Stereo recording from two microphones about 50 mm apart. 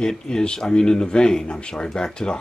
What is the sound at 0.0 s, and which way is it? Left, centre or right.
Speech, centre.